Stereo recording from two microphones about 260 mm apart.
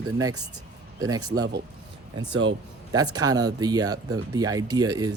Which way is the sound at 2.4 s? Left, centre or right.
Right.